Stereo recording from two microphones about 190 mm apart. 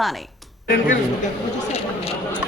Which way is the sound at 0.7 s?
45° left (ahead or behind).